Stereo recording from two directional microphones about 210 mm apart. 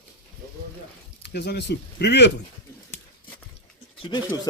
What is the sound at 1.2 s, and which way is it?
Speech, 50° left (ahead or behind).